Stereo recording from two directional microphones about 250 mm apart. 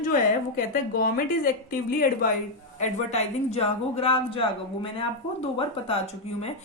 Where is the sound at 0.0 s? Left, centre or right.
Left.